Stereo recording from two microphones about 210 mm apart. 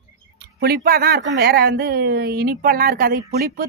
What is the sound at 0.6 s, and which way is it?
Speech, 50° right (ahead or behind).